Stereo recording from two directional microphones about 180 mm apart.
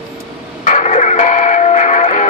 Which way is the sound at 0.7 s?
40° left (ahead or behind).